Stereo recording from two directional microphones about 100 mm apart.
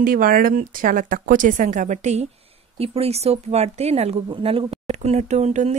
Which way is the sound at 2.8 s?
85° right.